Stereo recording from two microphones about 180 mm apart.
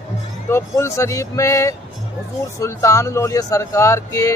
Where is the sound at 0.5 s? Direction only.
15° left (ahead or behind).